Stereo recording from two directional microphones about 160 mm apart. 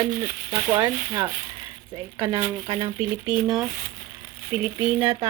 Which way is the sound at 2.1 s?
15° right (ahead or behind).